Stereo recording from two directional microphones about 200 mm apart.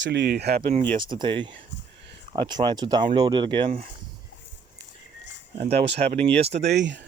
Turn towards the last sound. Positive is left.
turn(degrees=-65)  # may be behind; listen again after turning